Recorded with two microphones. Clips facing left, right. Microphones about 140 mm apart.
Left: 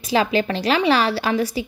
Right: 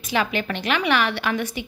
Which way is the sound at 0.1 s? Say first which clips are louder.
Left 5 dB; 35° left (ahead or behind).